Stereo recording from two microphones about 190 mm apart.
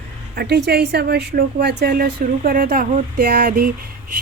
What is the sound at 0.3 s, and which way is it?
A woman's voice, 60° right (ahead or behind).